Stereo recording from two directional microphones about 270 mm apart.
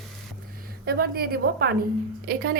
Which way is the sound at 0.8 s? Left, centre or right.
Right.